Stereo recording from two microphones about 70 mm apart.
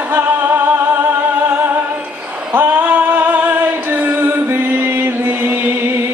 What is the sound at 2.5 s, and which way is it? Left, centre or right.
Music, right.